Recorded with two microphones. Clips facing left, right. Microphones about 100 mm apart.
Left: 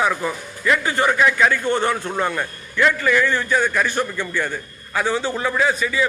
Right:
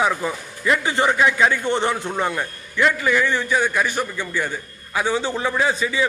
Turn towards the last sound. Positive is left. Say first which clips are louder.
# left 1 dB
turn(degrees=-25)  # may be behind; listen again after turning